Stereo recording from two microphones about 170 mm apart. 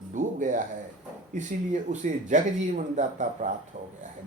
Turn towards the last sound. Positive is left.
turn(degrees=-45)  # may be behind; listen again after turning